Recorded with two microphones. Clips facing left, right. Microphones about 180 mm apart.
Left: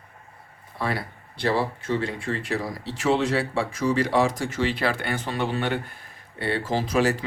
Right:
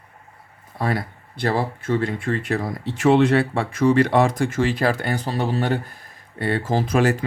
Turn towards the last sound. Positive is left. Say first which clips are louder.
# right 3 dB
turn(degrees=-50)  # may be behind; listen again after turning